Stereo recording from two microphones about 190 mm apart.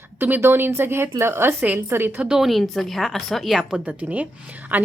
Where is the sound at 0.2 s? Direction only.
10° right (ahead or behind).